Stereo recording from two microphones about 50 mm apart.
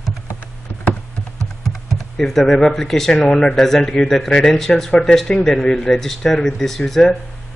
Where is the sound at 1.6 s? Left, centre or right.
Centre.